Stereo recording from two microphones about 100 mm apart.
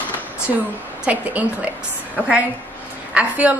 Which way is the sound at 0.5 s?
15° right (ahead or behind).